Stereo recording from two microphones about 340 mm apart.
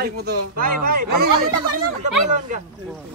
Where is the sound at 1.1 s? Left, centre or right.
Right.